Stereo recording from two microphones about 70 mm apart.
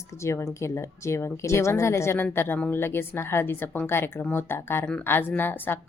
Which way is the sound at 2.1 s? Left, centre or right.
Left.